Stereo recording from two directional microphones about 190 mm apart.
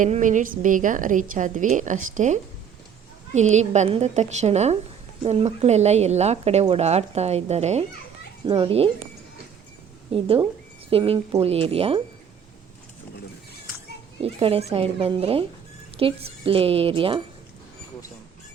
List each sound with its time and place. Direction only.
0.0 s a woman's voice: 40° right (ahead or behind)
10.1 s a woman's voice: 30° right (ahead or behind)
14.2 s a woman's voice: 30° right (ahead or behind)